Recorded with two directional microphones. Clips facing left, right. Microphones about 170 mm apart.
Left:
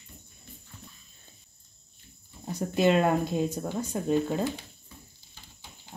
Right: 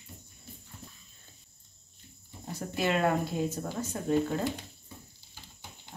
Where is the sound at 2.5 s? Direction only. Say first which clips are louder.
Left 6 dB; 20° left (ahead or behind).